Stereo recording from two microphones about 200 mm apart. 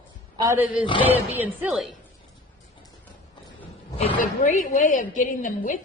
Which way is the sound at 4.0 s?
35° left (ahead or behind).